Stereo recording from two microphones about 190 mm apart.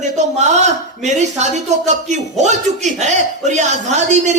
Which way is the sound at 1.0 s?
40° right (ahead or behind).